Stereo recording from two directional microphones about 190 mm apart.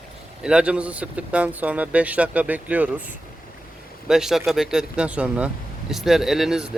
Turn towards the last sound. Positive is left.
turn(degrees=0)  # may be behind; listen again after turning